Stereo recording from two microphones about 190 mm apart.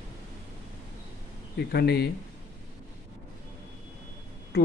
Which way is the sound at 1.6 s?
60° left (ahead or behind).